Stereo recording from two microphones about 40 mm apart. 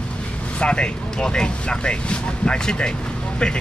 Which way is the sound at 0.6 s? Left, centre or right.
Left.